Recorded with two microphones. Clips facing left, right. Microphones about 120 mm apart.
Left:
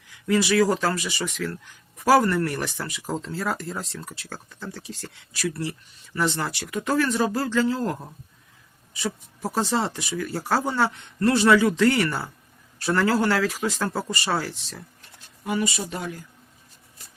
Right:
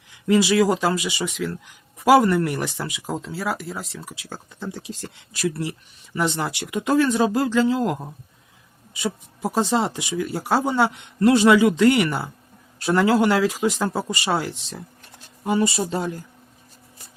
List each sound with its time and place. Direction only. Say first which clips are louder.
0.1 s speech: right 3 dB; 20° right (ahead or behind)
15.4 s speech: right 5 dB; 30° right (ahead or behind)